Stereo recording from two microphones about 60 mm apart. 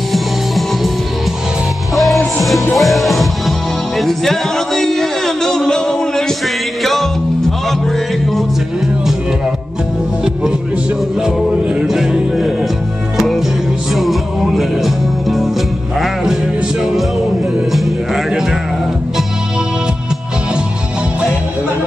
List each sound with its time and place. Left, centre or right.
0.1 s music: centre
2.0 s music: centre
11.2 s music: centre
13.9 s music: centre
17.7 s music: centre